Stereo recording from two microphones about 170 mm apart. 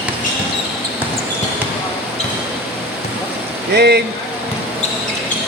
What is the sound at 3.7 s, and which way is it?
Speech, 75° right (ahead or behind).